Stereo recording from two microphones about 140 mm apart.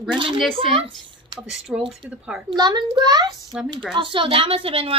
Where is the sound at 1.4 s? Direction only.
5° right (ahead or behind).